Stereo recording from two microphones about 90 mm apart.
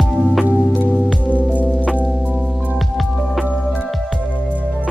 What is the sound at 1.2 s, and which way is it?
Music, 15° left (ahead or behind).